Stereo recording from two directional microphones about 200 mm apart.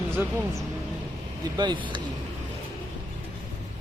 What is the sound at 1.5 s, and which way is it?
Speech, 20° right (ahead or behind).